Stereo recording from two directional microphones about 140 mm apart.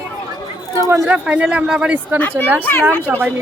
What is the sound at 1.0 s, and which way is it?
Speech, 10° right (ahead or behind).